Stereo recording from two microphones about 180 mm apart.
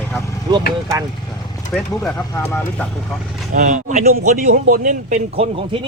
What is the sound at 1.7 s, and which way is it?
Speech, centre (ahead or behind).